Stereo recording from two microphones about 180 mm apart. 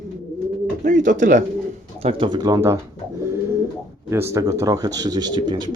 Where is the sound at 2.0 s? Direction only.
30° right (ahead or behind).